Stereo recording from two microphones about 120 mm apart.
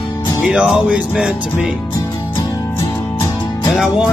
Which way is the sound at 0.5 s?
5° right (ahead or behind).